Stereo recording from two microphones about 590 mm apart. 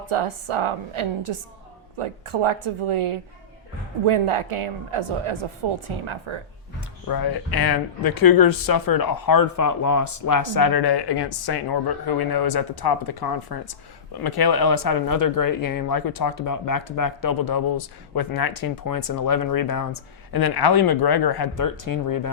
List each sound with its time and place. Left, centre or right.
0.0 s speech: right
7.1 s speech: left